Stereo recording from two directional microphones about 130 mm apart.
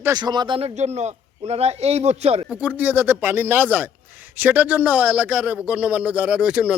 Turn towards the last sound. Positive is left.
turn(degrees=-10)  # may be behind; listen again after turning